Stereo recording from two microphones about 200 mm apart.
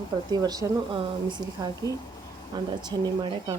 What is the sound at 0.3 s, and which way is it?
A woman's voice, 20° right (ahead or behind).